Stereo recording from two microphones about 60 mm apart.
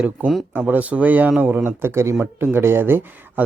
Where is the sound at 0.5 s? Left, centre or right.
Right.